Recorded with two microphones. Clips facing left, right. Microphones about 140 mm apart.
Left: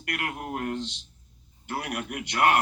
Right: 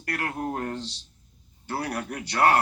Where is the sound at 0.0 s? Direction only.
35° right (ahead or behind).